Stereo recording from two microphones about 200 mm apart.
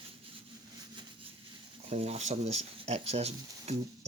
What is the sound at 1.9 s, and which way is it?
Speech, 30° right (ahead or behind).